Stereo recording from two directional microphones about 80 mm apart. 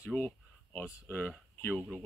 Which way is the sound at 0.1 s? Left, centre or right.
Centre.